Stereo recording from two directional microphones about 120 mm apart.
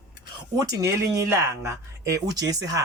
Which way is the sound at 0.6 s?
25° right (ahead or behind).